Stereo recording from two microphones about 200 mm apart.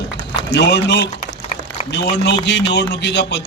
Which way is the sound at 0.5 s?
60° left (ahead or behind).